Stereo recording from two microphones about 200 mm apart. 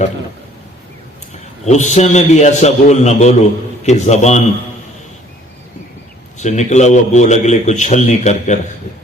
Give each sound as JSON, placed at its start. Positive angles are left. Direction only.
{"t": 1.3, "sound": "speech", "side_deg": 35}
{"t": 6.4, "sound": "speech", "side_deg": 35}